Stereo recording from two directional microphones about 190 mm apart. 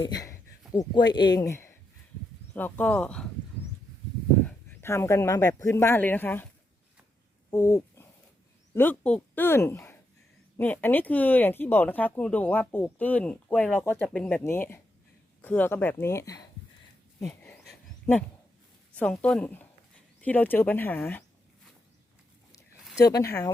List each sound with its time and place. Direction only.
0.1 s speech: 20° left (ahead or behind)
4.4 s speech: 10° left (ahead or behind)
7.5 s speech: 15° left (ahead or behind)
18.1 s speech: 10° left (ahead or behind)
23.0 s speech: 20° left (ahead or behind)